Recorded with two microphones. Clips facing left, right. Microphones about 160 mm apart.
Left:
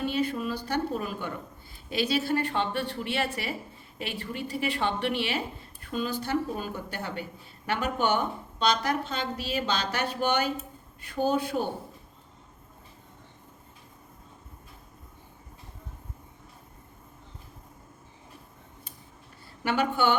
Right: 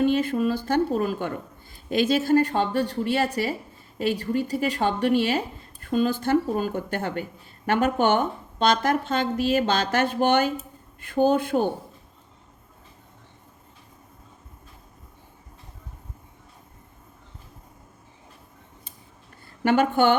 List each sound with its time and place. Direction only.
0.0 s a woman's voice: 50° right (ahead or behind)
19.6 s a woman's voice: 50° right (ahead or behind)